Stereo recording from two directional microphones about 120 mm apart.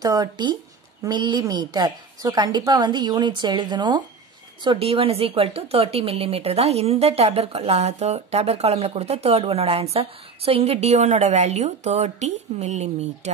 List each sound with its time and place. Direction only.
0.0 s a woman's voice: 35° right (ahead or behind)
4.6 s speech: 50° right (ahead or behind); by 13.3 s 70° right (ahead or behind)